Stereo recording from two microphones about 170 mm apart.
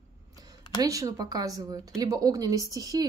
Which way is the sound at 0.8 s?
20° right (ahead or behind).